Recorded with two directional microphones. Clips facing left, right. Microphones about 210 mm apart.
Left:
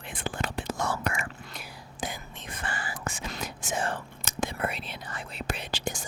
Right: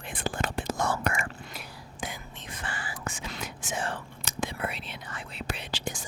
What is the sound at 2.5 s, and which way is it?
Whispering, 50° left (ahead or behind).